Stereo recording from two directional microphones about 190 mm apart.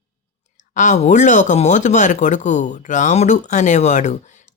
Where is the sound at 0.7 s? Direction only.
40° left (ahead or behind).